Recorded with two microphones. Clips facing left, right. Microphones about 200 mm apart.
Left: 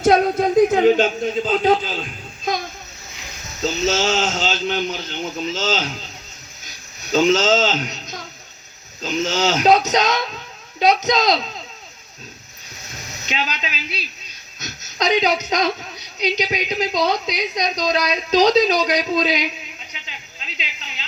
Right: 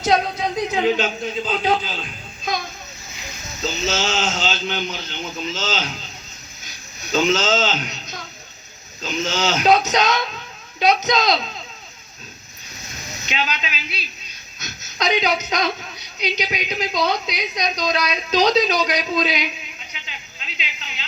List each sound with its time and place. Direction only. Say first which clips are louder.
0.0 s music: left 5 dB; 50° left (ahead or behind)
1.2 s a man's voice: left 4 dB; 45° left (ahead or behind)
3.6 s a man's voice: left 4 dB; 45° left (ahead or behind)
7.1 s a woman's voice: left 3 dB; 40° left (ahead or behind)
13.2 s a woman's voice: even; 40° left (ahead or behind)
19.9 s a sound: even; 35° left (ahead or behind)